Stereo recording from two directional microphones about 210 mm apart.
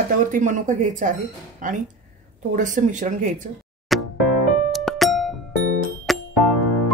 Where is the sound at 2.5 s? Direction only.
35° right (ahead or behind).